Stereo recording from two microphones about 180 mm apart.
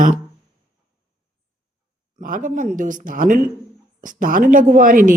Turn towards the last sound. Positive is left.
turn(degrees=-50)  # may be behind; listen again after turning